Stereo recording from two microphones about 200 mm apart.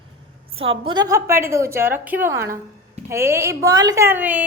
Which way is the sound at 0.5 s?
30° right (ahead or behind).